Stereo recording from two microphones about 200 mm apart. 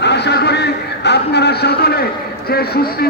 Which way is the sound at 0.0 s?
55° left (ahead or behind).